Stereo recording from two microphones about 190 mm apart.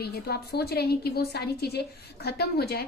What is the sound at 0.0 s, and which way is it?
A woman's voice, 55° left (ahead or behind).